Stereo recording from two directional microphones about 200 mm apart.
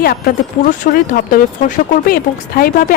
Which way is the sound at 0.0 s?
50° left (ahead or behind).